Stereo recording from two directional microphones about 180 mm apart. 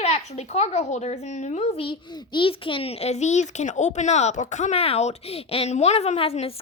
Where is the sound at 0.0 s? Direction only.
35° left (ahead or behind).